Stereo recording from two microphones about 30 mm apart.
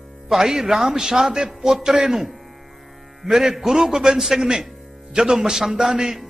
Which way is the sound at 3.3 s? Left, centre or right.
Centre.